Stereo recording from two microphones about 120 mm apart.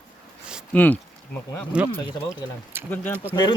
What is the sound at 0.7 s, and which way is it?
Speech, 15° left (ahead or behind).